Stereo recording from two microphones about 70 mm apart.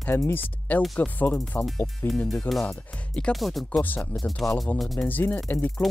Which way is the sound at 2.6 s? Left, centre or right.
Centre.